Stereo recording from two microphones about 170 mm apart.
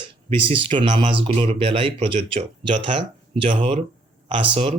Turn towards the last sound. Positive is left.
turn(degrees=-30)  # may be behind; listen again after turning